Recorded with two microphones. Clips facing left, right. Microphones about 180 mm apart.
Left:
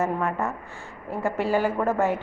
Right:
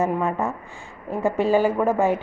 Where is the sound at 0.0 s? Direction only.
20° right (ahead or behind).